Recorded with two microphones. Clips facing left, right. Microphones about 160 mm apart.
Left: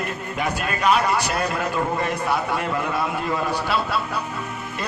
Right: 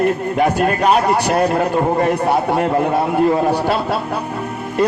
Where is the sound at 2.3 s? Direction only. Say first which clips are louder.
Right 8 dB; 45° right (ahead or behind).